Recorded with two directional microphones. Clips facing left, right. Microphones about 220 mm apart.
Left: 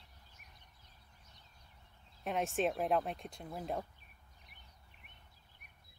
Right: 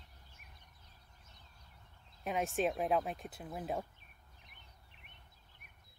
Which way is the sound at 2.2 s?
Centre (ahead or behind).